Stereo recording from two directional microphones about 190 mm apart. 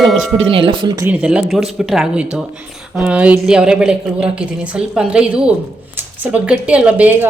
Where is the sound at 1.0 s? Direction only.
5° right (ahead or behind).